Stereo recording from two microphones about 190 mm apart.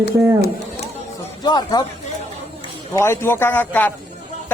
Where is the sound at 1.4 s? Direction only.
20° left (ahead or behind).